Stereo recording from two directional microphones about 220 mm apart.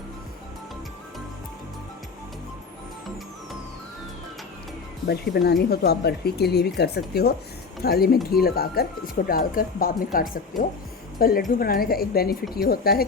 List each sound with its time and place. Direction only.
5.0 s speech: 50° left (ahead or behind)